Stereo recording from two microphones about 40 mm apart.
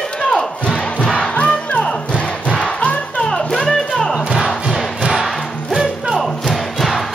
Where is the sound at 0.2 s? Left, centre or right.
Centre.